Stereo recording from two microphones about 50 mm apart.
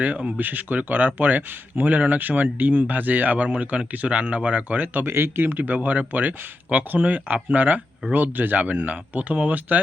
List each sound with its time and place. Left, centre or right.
0.3 s speech: right
5.0 s speech: right